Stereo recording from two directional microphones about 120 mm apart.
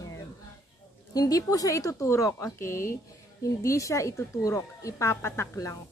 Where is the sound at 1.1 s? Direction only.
30° left (ahead or behind).